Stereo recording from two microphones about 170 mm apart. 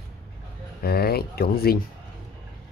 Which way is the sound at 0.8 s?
65° left (ahead or behind).